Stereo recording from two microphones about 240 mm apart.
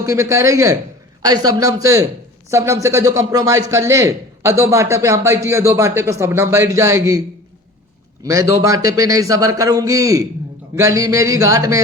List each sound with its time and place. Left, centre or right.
0.0 s speech: centre